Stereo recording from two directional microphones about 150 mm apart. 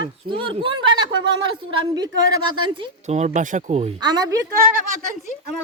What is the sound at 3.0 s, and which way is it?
Speech, 50° right (ahead or behind).